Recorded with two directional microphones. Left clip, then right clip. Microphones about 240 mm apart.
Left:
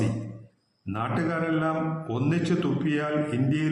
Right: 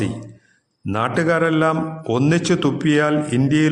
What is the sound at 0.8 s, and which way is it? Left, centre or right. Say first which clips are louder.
A man's voice: right 10 dB; right.